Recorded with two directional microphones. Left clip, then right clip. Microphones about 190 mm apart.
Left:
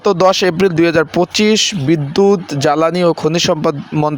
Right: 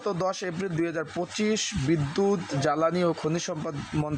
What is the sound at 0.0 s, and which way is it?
Speech, 45° left (ahead or behind).